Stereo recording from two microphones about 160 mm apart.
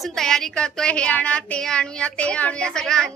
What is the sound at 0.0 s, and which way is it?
A woman's voice, 5° left (ahead or behind).